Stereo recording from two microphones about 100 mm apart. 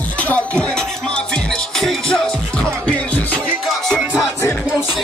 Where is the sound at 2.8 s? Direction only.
10° left (ahead or behind).